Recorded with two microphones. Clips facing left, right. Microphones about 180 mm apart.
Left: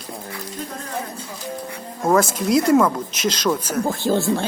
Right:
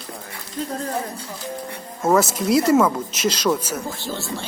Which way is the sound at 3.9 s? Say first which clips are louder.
Left 9 dB; 55° left (ahead or behind).